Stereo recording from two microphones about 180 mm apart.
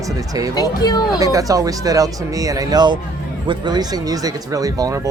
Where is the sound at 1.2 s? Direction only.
20° right (ahead or behind).